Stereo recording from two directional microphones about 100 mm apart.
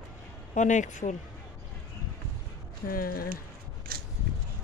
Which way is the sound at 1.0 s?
90° left.